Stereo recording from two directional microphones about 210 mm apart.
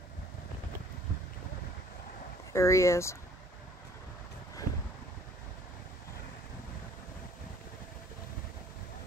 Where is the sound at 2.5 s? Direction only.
15° left (ahead or behind).